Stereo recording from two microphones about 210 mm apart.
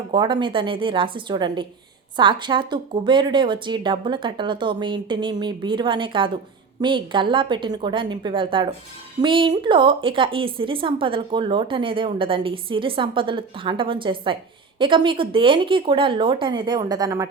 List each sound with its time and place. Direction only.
0.1 s a woman's voice: 20° right (ahead or behind)